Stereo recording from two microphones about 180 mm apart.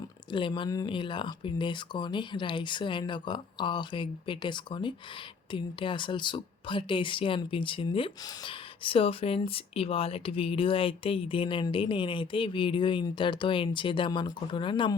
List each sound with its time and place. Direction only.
0.3 s speech: 25° left (ahead or behind)